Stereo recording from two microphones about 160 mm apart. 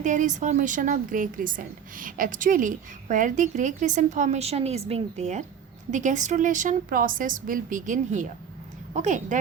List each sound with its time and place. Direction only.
0.0 s a woman's voice: 50° right (ahead or behind)